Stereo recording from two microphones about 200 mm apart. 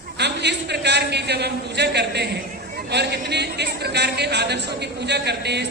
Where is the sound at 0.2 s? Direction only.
60° right (ahead or behind).